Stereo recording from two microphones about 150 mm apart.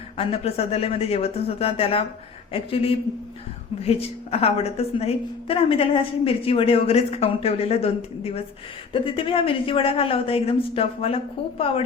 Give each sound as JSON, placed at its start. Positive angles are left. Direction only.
{"t": 0.2, "sound": "a woman's voice", "side_deg": 40}